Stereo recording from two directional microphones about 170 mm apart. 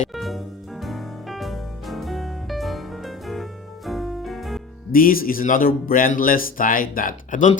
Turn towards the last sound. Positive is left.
turn(degrees=55)  # may be behind; listen again after turning